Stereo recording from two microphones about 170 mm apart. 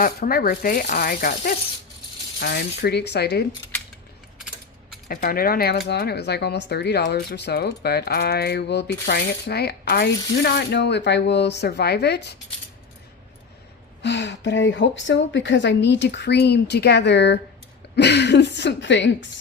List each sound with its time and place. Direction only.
0.0 s speech: 60° left (ahead or behind)
2.4 s speech: 80° left
4.4 s mechanisms: 5° right (ahead or behind)
5.0 s speech: 55° left (ahead or behind); by 12.3 s 75° left (ahead or behind)
14.0 s speech: 90° left